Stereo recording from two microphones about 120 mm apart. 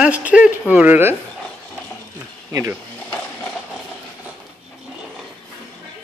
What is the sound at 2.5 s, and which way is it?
Speech, 25° right (ahead or behind).